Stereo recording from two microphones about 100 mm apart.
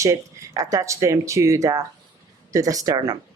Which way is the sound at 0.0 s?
30° right (ahead or behind).